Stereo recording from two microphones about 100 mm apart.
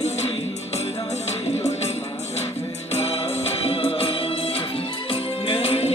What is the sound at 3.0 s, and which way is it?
Music, 90° left.